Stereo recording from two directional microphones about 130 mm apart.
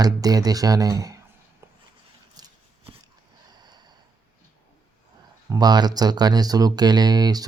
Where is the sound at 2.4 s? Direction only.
30° right (ahead or behind).